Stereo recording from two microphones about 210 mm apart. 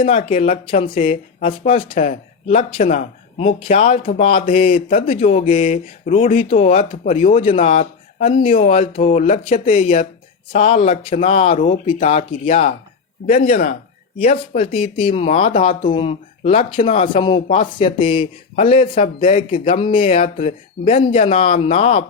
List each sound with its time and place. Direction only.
0.3 s speech: 25° left (ahead or behind)
7.3 s speech: 25° left (ahead or behind)